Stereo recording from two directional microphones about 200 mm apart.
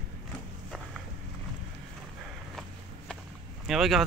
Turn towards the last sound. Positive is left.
turn(degrees=0)  # may be behind; listen again after turning